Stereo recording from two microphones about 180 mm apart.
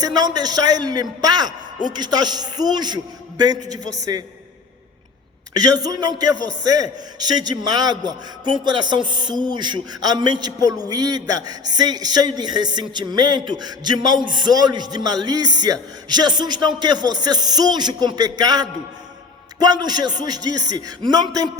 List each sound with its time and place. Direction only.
0.0 s a man's voice: 20° right (ahead or behind)
5.5 s a man's voice: 20° right (ahead or behind)